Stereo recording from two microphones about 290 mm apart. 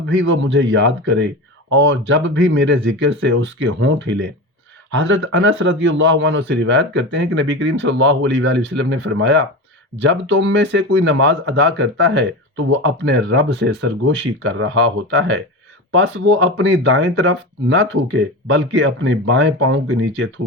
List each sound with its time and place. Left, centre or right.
0.1 s speech: right